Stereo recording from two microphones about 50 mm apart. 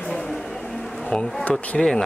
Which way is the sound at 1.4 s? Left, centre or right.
Left.